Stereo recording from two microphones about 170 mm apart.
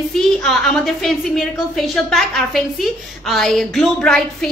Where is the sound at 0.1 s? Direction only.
Centre (ahead or behind).